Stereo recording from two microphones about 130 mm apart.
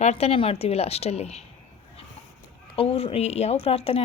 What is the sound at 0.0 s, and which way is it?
Speech, 55° left (ahead or behind).